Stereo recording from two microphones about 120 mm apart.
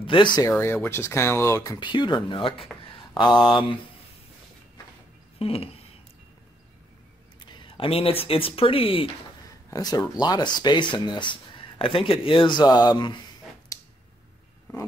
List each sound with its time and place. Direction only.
0.0 s a sound: 45° left (ahead or behind)
0.6 s speech: 20° left (ahead or behind); by 3.7 s 45° left (ahead or behind)
5.4 s speech: 55° left (ahead or behind)
7.4 s speech: 40° left (ahead or behind)
9.7 s speech: 30° left (ahead or behind)